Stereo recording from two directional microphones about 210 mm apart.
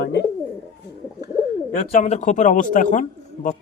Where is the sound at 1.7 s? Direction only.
35° left (ahead or behind).